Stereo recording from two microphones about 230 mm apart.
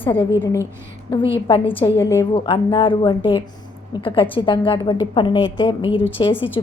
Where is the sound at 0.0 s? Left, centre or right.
Left.